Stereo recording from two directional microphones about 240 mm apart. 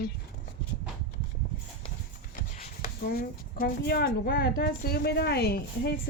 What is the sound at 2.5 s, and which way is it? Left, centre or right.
Speech, left.